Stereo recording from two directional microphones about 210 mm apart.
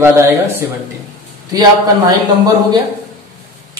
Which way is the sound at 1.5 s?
20° right (ahead or behind).